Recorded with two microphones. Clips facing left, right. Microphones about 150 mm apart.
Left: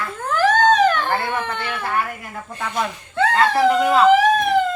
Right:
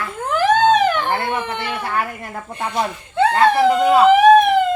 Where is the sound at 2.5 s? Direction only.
25° right (ahead or behind).